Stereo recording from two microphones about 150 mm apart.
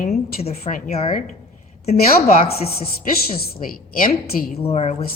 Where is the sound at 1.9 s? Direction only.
90° left; by 4.5 s 70° left (ahead or behind).